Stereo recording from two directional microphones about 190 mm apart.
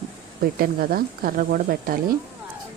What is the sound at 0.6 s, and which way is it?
A woman's voice, 50° right (ahead or behind).